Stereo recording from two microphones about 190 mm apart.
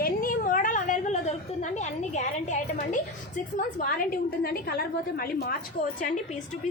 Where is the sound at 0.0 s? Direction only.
45° left (ahead or behind).